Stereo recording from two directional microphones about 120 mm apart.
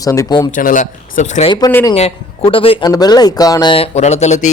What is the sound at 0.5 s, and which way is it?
Speech, 90° left.